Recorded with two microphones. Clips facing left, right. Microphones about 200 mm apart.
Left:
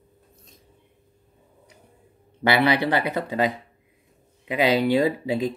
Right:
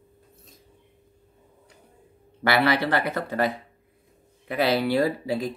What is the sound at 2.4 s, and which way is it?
Speech, 15° left (ahead or behind).